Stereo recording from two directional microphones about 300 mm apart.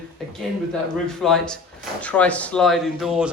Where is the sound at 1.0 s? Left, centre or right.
Centre.